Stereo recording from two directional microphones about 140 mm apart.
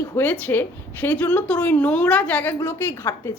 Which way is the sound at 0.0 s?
15° left (ahead or behind).